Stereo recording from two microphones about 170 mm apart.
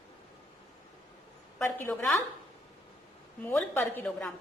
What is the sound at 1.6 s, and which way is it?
Speech, 15° left (ahead or behind).